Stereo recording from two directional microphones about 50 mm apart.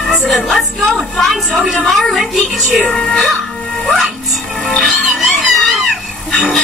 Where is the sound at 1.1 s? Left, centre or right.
Centre.